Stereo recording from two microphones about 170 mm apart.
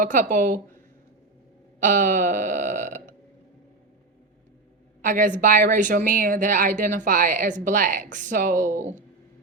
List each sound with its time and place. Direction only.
0.0 s a woman's voice: 50° right (ahead or behind)
1.8 s a woman's voice: 50° right (ahead or behind)
5.0 s a woman's voice: 50° right (ahead or behind)